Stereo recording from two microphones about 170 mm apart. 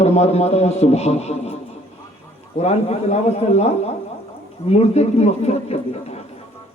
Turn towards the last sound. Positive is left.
turn(degrees=40)  # may be behind; listen again after turning